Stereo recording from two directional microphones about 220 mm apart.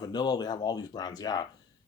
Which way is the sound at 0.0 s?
20° left (ahead or behind).